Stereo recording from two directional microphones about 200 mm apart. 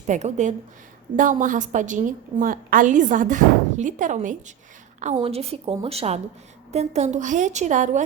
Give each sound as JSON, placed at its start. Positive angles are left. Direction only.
{"t": 0.1, "sound": "a woman's voice", "side_deg": -35}